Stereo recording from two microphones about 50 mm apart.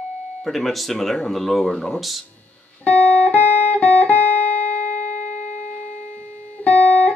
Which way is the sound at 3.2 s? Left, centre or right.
Left.